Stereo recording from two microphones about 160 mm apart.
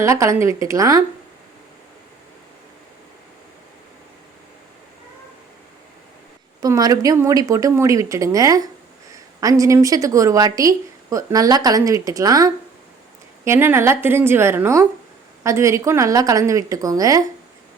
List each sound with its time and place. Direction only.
0.0 s speech: 20° right (ahead or behind)
6.6 s a woman's voice: 25° right (ahead or behind)